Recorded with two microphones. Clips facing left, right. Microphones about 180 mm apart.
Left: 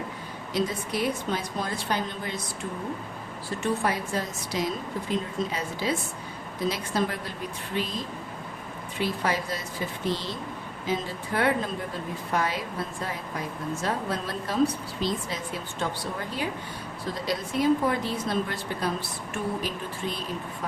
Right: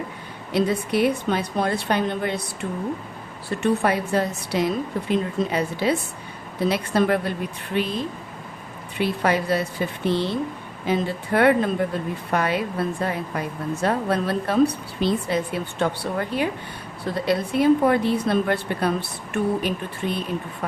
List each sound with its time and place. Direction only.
0.5 s a woman's voice: 65° right (ahead or behind)
3.6 s a woman's voice: 65° right (ahead or behind)